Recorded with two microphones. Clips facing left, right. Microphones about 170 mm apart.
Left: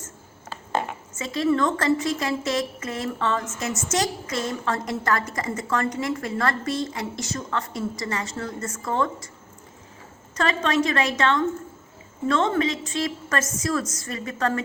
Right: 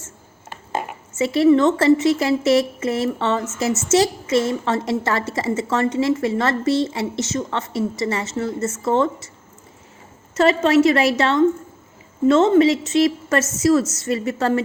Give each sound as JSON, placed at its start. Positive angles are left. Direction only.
{"t": 0.5, "sound": "a sound", "side_deg": -10}
{"t": 1.2, "sound": "a woman's voice", "side_deg": -30}
{"t": 10.3, "sound": "a woman's voice", "side_deg": -30}